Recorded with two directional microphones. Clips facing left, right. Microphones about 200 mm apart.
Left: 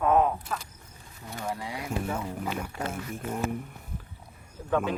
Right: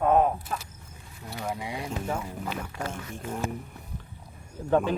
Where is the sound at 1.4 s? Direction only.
10° right (ahead or behind).